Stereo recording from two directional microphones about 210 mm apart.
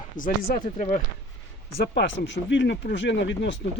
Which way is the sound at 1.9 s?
60° left (ahead or behind).